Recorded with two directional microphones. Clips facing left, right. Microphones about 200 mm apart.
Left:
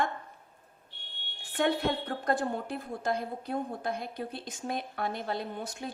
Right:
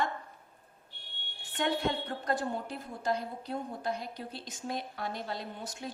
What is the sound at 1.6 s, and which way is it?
A woman's voice, 55° left (ahead or behind).